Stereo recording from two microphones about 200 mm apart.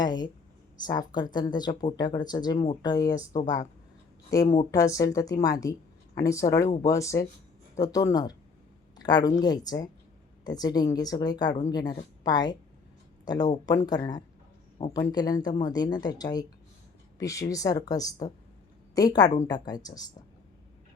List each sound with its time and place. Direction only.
0.0 s speech: 20° left (ahead or behind)
3.4 s speech: 40° left (ahead or behind)
4.3 s speech: 15° left (ahead or behind)